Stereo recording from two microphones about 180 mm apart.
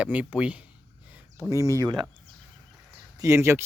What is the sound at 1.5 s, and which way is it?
Speech, 20° right (ahead or behind).